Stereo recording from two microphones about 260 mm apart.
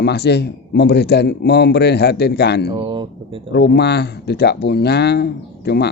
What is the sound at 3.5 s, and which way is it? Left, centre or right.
Speech, left.